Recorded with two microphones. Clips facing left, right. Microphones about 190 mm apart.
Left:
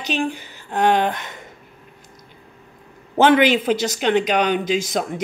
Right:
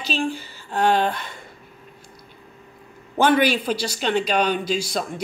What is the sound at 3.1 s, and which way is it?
A man's voice, 20° left (ahead or behind).